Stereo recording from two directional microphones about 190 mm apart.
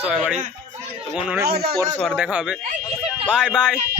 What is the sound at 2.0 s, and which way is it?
Speech, 5° left (ahead or behind).